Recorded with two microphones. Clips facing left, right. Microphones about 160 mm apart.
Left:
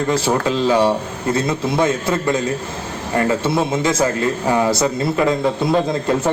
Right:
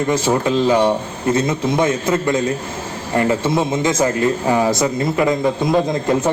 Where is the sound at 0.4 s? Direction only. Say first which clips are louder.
Right 1 dB; 20° right (ahead or behind).